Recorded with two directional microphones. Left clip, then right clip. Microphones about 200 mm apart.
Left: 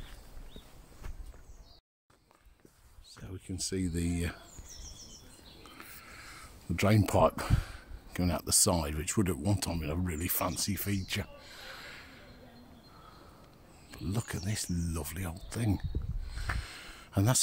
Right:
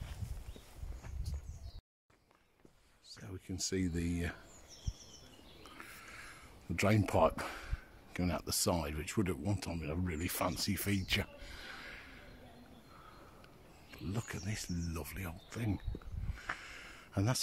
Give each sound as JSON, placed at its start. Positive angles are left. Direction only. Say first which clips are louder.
{"t": 3.2, "sound": "speech", "louder": "left 2 dB", "side_deg": 5}
{"t": 5.6, "sound": "speech", "louder": "left 1 dB", "side_deg": 5}
{"t": 10.0, "sound": "speech", "louder": "left 1 dB", "side_deg": 0}
{"t": 13.9, "sound": "speech", "louder": "left 4 dB", "side_deg": 20}
{"t": 16.5, "sound": "a sound", "louder": "left 4 dB", "side_deg": 20}